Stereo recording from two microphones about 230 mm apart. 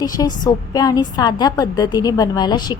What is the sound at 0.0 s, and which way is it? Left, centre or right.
A woman's voice, centre.